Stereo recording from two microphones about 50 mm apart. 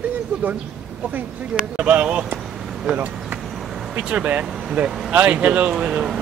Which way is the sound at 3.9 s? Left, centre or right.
Right.